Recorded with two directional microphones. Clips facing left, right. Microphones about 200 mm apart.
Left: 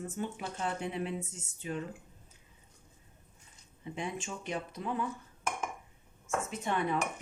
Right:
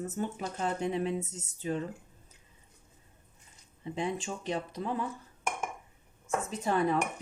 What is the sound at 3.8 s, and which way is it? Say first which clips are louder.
Speech: right 5 dB; 35° right (ahead or behind).